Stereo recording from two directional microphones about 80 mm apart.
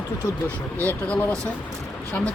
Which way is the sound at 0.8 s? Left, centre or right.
Centre.